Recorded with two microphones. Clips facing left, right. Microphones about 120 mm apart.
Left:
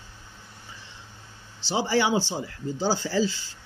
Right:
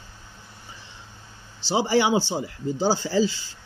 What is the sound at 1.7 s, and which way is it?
Speech, 20° right (ahead or behind).